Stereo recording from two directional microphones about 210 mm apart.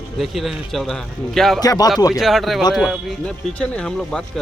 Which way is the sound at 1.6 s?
20° left (ahead or behind).